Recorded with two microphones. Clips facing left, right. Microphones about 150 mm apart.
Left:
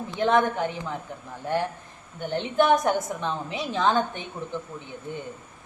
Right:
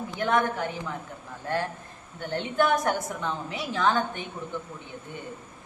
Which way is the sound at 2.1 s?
20° left (ahead or behind).